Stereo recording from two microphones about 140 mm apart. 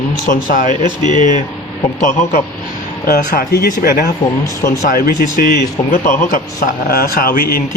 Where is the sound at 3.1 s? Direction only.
90° left.